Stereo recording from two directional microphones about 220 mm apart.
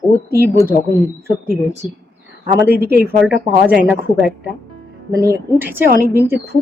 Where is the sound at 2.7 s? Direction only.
45° right (ahead or behind).